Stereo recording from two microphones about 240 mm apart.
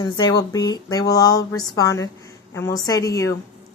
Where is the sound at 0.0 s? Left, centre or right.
Centre.